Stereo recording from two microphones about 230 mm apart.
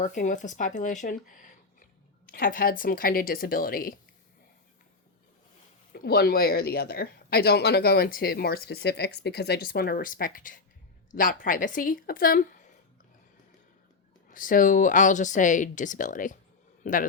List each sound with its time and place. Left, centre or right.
0.0 s speech: left
5.9 s speech: left
14.3 s a man's voice: left